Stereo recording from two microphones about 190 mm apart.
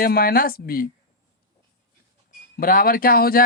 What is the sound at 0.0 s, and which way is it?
Speech, 50° left (ahead or behind).